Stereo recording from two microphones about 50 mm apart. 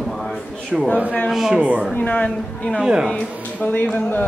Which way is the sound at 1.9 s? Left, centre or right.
Left.